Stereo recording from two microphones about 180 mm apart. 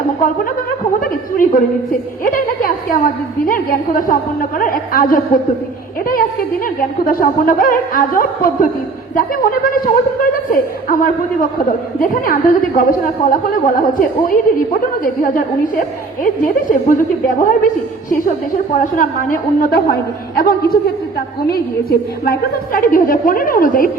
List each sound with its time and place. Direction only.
0.9 s chuckle: 50° left (ahead or behind)
2.2 s a sound: 50° left (ahead or behind)
3.4 s a woman's voice: 50° left (ahead or behind)
6.7 s a woman's voice: 50° left (ahead or behind)
18.7 s a woman's voice: 45° left (ahead or behind)